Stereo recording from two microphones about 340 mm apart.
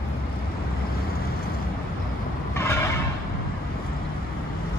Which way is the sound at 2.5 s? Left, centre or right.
Centre.